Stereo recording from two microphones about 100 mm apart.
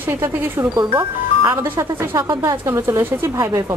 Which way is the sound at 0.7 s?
45° right (ahead or behind).